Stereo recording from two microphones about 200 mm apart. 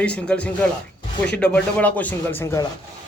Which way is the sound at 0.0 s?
5° left (ahead or behind).